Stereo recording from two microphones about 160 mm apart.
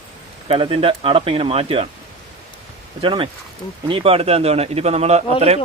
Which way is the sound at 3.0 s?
30° right (ahead or behind).